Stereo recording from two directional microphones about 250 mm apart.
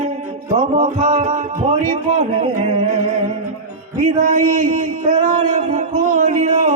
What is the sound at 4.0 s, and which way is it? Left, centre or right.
A man's voice, right.